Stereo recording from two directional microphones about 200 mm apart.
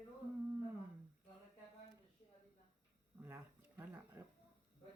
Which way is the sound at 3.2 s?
10° right (ahead or behind).